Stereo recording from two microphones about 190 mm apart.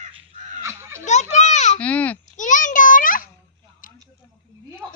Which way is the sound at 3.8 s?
45° left (ahead or behind).